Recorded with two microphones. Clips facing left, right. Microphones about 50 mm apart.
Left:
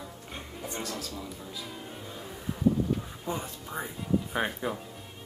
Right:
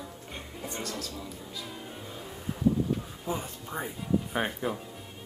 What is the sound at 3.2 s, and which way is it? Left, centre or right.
Speech, centre.